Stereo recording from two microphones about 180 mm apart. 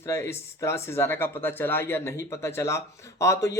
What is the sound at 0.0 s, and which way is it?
Speech, 15° left (ahead or behind).